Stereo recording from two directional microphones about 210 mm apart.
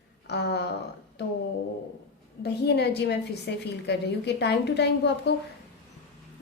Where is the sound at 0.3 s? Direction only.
55° left (ahead or behind).